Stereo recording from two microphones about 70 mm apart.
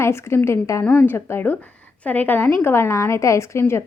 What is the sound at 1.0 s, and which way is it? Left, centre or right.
A woman's voice, left.